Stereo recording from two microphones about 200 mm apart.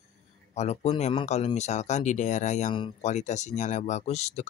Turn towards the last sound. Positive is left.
turn(degrees=35)  # may be behind; listen again after turning